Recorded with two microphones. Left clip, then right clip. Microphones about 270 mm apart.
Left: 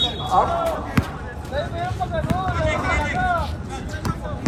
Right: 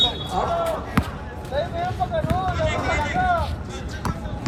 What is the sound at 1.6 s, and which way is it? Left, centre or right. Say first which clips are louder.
Speech: right 1 dB; right.